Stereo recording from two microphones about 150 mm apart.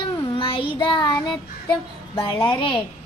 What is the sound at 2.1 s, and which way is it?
Speech, 35° left (ahead or behind).